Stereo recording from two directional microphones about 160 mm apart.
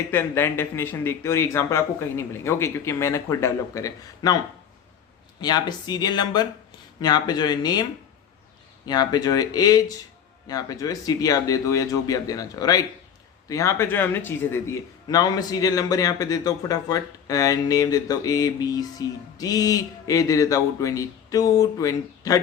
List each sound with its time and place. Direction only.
0.1 s speech: 15° left (ahead or behind)
5.4 s a man's voice: 25° left (ahead or behind)
8.9 s a man's voice: 25° left (ahead or behind)